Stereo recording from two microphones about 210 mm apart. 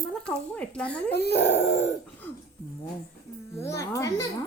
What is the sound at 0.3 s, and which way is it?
Speech, 5° left (ahead or behind).